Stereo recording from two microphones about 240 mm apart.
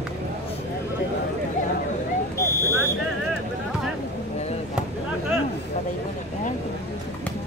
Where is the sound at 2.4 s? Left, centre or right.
Centre.